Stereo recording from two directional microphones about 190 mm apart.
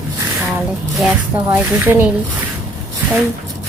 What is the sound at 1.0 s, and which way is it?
A woman's voice, 5° right (ahead or behind).